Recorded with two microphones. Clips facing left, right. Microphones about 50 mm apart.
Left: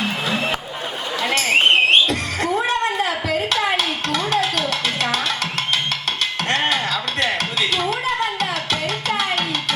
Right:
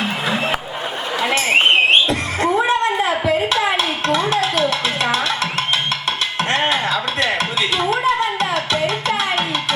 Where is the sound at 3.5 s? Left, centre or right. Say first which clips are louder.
Right 2 dB; centre.